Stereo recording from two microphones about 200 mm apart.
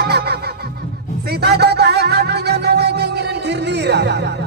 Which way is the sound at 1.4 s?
55° right (ahead or behind).